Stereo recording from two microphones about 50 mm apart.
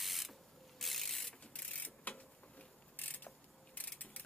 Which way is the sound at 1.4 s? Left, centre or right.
Left.